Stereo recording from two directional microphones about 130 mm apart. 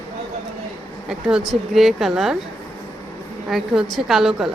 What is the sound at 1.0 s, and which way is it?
A woman's voice, 5° right (ahead or behind).